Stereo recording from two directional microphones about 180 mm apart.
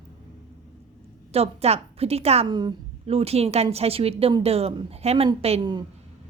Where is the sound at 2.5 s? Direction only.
25° right (ahead or behind).